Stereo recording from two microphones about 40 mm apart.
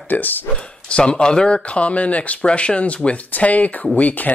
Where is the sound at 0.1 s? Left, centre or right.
Left.